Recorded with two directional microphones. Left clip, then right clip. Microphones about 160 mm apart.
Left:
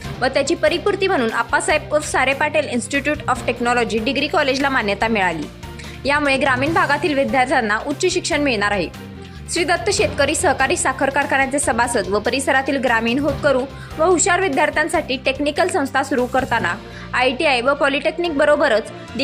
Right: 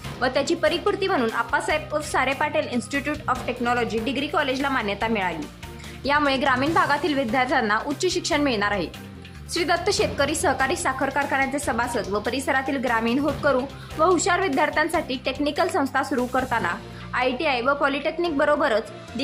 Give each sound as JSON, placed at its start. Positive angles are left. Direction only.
{"t": 0.2, "sound": "a woman's voice", "side_deg": 15}
{"t": 6.0, "sound": "a woman's voice", "side_deg": 20}